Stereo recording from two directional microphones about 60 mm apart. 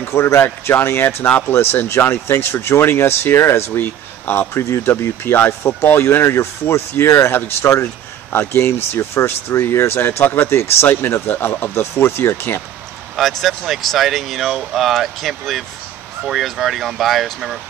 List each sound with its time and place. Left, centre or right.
0.0 s speech: left
4.6 s speech: left
4.9 s speech: left
6.2 s speech: left
13.1 s speech: centre